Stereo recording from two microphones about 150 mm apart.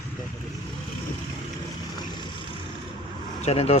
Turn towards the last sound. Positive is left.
turn(degrees=45)  # may be behind; listen again after turning